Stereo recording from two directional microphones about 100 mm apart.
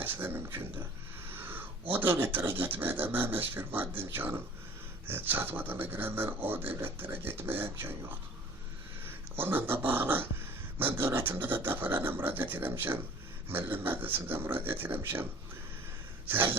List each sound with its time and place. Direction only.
0.0 s dog: 20° right (ahead or behind)
1.3 s speech: 20° right (ahead or behind)
16.2 s a sound: 20° right (ahead or behind)